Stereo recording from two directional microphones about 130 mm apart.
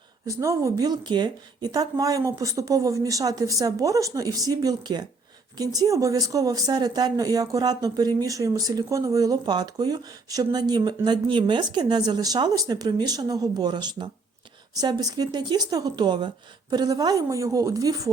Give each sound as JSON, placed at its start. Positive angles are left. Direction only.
{"t": 0.3, "sound": "speech", "side_deg": -25}